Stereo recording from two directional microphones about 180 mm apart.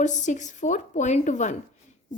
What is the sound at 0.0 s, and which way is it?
A woman's voice, 40° left (ahead or behind).